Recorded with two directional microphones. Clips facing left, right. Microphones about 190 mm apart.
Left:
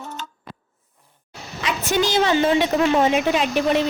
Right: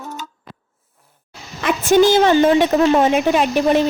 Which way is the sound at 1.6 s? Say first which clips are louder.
Right 8 dB; 50° right (ahead or behind).